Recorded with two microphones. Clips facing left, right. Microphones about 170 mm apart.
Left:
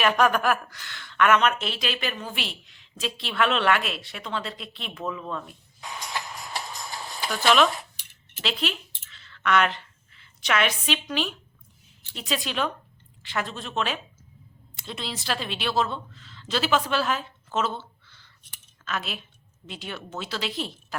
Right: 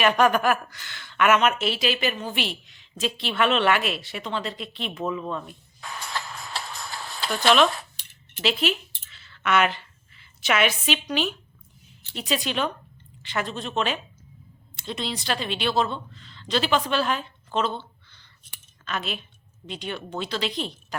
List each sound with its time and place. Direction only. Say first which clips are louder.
0.0 s a woman's voice: right 2 dB; centre (ahead or behind)
5.8 s music: even; 15° left (ahead or behind)
7.4 s a woman's voice: right 1 dB; centre (ahead or behind)
7.8 s keys jangling: even; 10° left (ahead or behind)
8.4 s a sound: right 5 dB; 5° right (ahead or behind)
11.1 s a woman's voice: right 2 dB; centre (ahead or behind)